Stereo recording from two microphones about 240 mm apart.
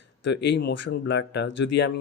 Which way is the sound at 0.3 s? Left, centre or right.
Left.